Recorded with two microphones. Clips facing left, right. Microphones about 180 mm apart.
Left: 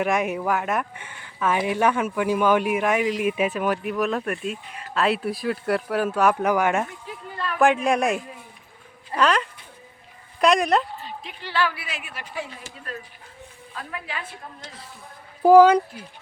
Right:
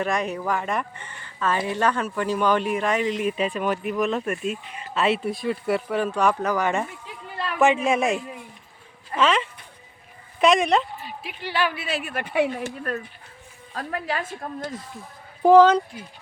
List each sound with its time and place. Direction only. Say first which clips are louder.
0.0 s speech: left 2 dB; 10° left (ahead or behind)
7.6 s speech: even; centre (ahead or behind)
11.0 s a woman's voice: right 2 dB; 10° right (ahead or behind); by 12.0 s 30° right (ahead or behind)
12.0 s speech: right 13 dB; 55° right (ahead or behind)
13.7 s speech: right 6 dB; 40° right (ahead or behind)
15.4 s speech: left 1 dB; 10° left (ahead or behind)